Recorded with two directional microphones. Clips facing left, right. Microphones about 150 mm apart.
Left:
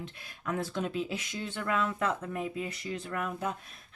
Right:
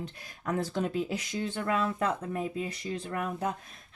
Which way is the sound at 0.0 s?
40° right (ahead or behind).